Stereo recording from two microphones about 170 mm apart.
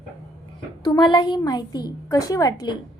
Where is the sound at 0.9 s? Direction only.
25° left (ahead or behind).